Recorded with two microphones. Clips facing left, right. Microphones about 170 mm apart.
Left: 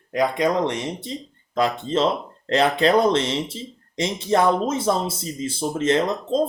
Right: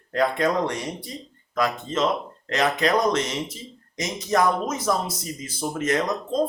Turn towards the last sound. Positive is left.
turn(degrees=25)  # may be behind; listen again after turning